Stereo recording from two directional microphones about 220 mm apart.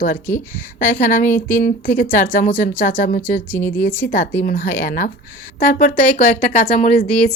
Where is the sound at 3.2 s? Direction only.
10° left (ahead or behind).